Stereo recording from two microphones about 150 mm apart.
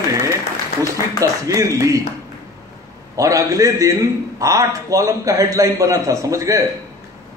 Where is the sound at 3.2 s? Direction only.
25° right (ahead or behind).